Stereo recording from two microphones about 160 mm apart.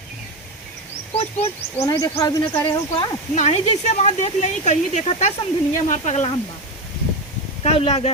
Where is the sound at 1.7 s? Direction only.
20° left (ahead or behind).